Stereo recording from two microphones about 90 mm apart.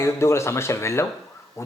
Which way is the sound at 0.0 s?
30° left (ahead or behind).